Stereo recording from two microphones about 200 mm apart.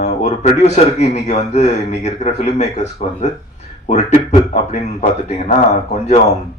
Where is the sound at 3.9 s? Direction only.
35° left (ahead or behind).